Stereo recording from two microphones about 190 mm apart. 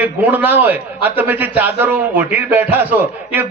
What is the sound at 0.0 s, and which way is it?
A man's voice, 10° right (ahead or behind).